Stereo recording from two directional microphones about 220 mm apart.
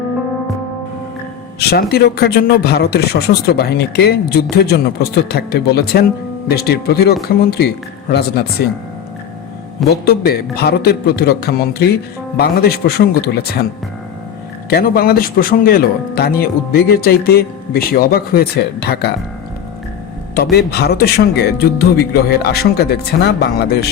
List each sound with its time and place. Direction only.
1.5 s a man's voice: 45° left (ahead or behind)
9.9 s a man's voice: 45° left (ahead or behind)
14.7 s a man's voice: 45° left (ahead or behind)
20.3 s a man's voice: 45° left (ahead or behind)